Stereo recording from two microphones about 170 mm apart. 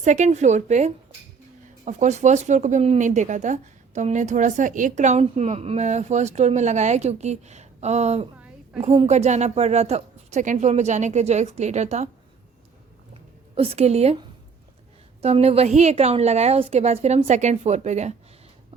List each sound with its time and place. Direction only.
0.0 s speech: 45° right (ahead or behind)
8.4 s a sound: 5° right (ahead or behind)
8.8 s a woman's voice: 40° right (ahead or behind)
13.6 s a woman's voice: 35° right (ahead or behind)
15.2 s a woman's voice: 35° right (ahead or behind)